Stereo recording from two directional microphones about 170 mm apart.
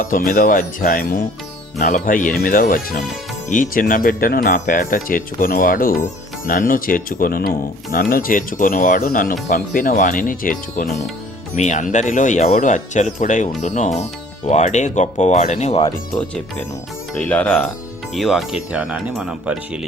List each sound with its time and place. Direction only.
0.0 s speech: 55° left (ahead or behind); by 15.9 s 35° left (ahead or behind)
17.2 s speech: 10° left (ahead or behind)